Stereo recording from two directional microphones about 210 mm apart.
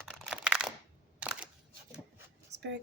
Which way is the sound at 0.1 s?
5° right (ahead or behind).